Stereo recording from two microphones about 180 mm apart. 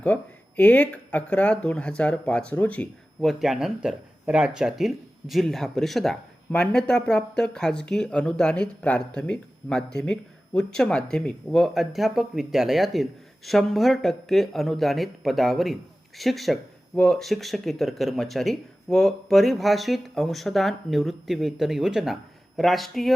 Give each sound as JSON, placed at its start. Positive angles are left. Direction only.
{"t": 0.0, "sound": "speech", "side_deg": 10}